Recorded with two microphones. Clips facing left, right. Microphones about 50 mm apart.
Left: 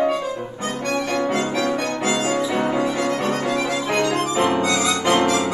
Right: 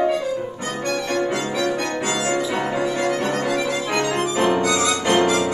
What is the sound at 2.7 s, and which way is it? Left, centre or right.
Violin, centre.